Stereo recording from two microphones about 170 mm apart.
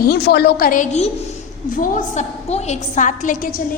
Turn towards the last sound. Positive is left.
turn(degrees=50)  # may be behind; listen again after turning